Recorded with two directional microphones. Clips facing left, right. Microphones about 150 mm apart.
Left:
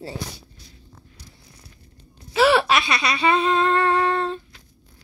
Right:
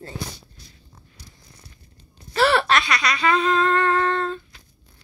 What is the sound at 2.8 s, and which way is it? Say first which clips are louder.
Speech: left 1 dB; 25° left (ahead or behind).